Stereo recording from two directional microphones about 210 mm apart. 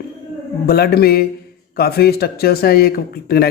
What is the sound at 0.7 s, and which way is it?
Speech, 45° left (ahead or behind).